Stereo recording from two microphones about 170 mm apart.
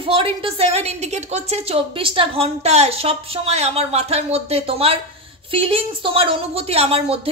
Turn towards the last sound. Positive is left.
turn(degrees=-35)  # may be behind; listen again after turning